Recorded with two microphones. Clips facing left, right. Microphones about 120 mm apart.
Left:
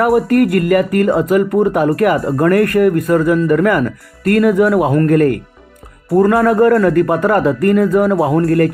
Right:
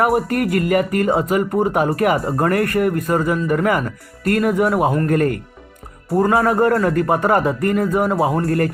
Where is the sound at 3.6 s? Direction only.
55° left (ahead or behind).